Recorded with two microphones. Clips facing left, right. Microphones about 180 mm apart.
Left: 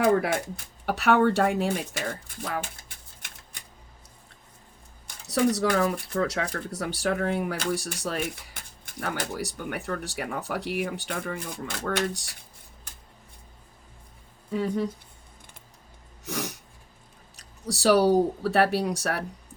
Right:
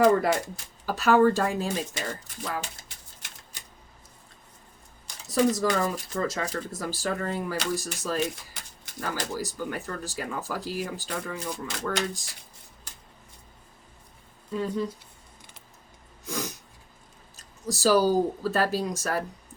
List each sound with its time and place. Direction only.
0.1 s speech: 60° left (ahead or behind)
3.2 s typewriter: 60° left (ahead or behind)
5.0 s speech: 75° left (ahead or behind)
14.5 s speech: 75° left (ahead or behind)
16.2 s a sound: 75° left (ahead or behind)
17.3 s speech: 75° left (ahead or behind)